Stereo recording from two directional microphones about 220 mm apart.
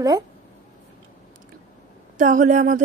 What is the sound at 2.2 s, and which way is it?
Speech, 35° right (ahead or behind).